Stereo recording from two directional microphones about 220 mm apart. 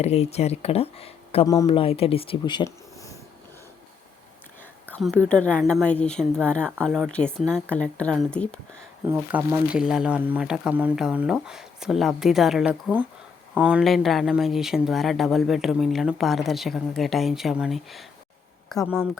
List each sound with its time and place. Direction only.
0.0 s speech: 30° left (ahead or behind)
4.9 s speech: 5° left (ahead or behind)
9.0 s speech: 10° right (ahead or behind)